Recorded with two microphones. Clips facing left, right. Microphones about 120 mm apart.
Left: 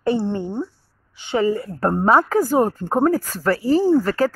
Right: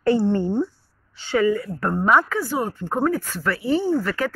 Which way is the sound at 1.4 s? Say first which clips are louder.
Left 1 dB; 30° left (ahead or behind).